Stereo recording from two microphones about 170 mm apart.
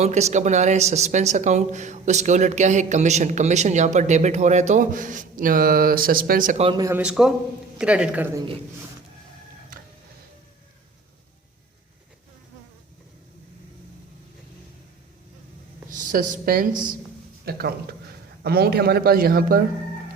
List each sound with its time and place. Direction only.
0.0 s speech: 40° right (ahead or behind)
6.6 s a man's voice: 30° right (ahead or behind)
7.0 s a man's voice: 5° right (ahead or behind)
15.9 s a man's voice: 50° right (ahead or behind)